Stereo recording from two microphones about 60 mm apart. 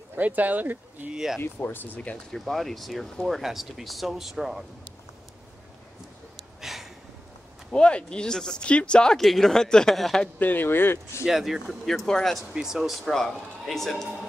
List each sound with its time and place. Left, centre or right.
0.1 s speech: right
1.1 s speech: centre
1.4 s speech: left
2.3 s speech: centre
6.6 s a sound: centre
7.7 s speech: centre
10.4 s speech: left
11.2 s speech: centre
12.5 s speech: centre
13.0 s speech: centre